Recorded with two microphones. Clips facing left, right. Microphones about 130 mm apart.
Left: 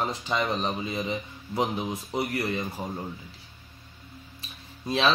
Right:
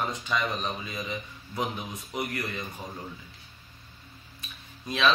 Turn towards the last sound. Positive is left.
turn(degrees=35)  # may be behind; listen again after turning